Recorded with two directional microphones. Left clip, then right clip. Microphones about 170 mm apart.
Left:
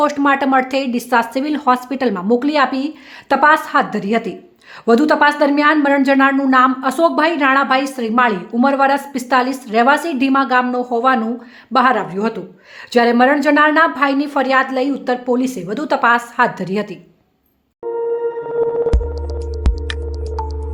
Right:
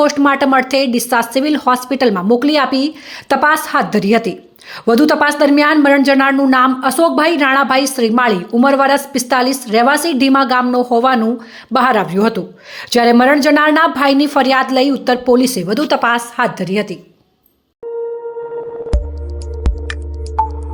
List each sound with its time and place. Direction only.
0.0 s a woman's voice: 10° right (ahead or behind)
15.9 s a woman's voice: 15° right (ahead or behind)
19.6 s music: centre (ahead or behind)